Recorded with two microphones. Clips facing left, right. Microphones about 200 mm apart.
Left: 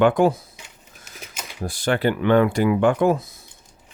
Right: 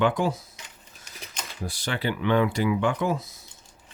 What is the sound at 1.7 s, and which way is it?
Speech, 50° left (ahead or behind).